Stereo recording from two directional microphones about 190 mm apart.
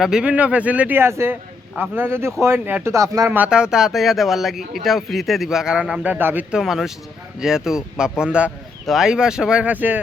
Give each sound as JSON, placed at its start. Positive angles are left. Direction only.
{"t": 0.0, "sound": "speech", "side_deg": -5}